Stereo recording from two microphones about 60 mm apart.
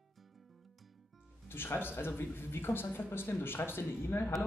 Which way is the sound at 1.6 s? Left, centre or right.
Left.